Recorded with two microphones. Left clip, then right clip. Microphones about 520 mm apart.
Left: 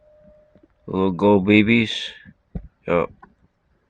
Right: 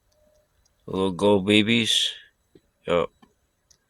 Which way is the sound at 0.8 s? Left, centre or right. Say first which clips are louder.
Left 3 dB; right.